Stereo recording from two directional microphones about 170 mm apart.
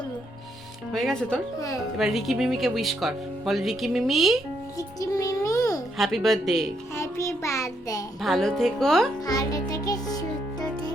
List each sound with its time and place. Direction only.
0.9 s speech: 5° left (ahead or behind)
1.5 s speech: 20° left (ahead or behind)
2.0 s speech: centre (ahead or behind)
4.8 s a child's voice: 20° left (ahead or behind)
6.0 s speech: centre (ahead or behind)
6.9 s child singing: 15° left (ahead or behind)
8.2 s speech: centre (ahead or behind)
9.2 s music: 20° left (ahead or behind)